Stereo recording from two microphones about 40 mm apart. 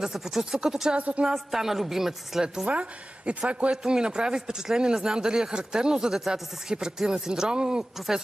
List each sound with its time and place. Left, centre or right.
0.0 s speech: centre
0.9 s speech: right
1.2 s speech: centre
2.4 s speech: centre
2.7 s speech: right
3.7 s speech: centre